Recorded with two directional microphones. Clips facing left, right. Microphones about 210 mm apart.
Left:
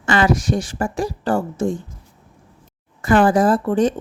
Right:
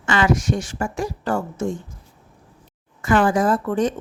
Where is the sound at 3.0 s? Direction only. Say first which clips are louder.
Left 3 dB; 35° left (ahead or behind).